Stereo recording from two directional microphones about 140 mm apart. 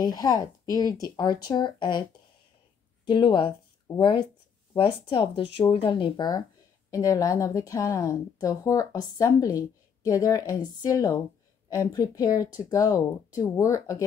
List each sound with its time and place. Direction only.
0.0 s a woman's voice: 30° left (ahead or behind)
3.1 s a woman's voice: 35° left (ahead or behind)